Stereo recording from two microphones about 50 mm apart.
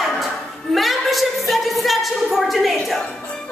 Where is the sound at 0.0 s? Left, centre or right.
Centre.